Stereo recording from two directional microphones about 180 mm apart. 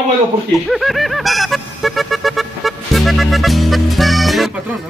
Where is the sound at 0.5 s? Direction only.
Centre (ahead or behind).